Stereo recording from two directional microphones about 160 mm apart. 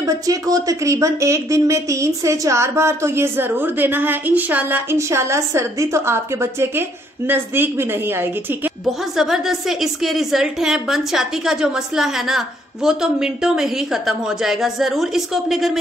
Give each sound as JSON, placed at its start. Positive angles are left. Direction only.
{"t": 0.0, "sound": "a woman's voice", "side_deg": -20}
{"t": 9.1, "sound": "a woman's voice", "side_deg": 0}